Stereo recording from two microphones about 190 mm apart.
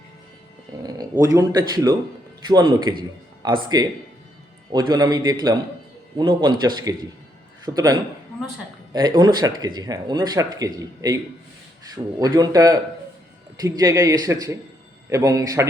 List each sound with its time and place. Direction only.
0.8 s a man's voice: 20° right (ahead or behind)
12.2 s a man's voice: 20° right (ahead or behind)